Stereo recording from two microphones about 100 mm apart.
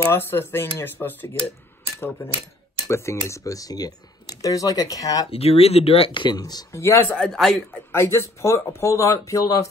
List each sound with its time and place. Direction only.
0.0 s speech: 25° left (ahead or behind)
5.3 s speech: 85° left
6.1 s speech: 45° left (ahead or behind)
6.7 s speech: 25° left (ahead or behind)
7.2 s speech: 5° left (ahead or behind)
7.9 s speech: 25° left (ahead or behind)